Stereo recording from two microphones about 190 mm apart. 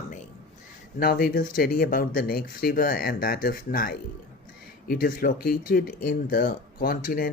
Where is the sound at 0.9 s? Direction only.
50° left (ahead or behind).